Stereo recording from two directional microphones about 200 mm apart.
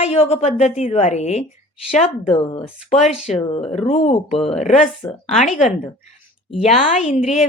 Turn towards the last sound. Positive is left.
turn(degrees=35)  # may be behind; listen again after turning